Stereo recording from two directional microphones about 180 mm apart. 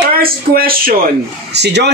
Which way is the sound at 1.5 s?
70° right (ahead or behind).